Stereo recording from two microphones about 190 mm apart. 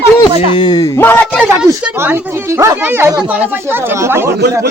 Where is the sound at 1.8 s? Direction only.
10° right (ahead or behind).